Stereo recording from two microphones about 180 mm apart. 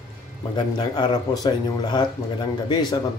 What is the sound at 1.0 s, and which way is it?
Speech, 20° left (ahead or behind).